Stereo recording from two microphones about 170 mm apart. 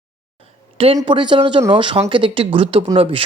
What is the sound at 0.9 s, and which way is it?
Speech, 30° right (ahead or behind).